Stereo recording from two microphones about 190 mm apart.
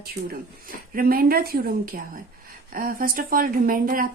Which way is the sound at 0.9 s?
50° right (ahead or behind).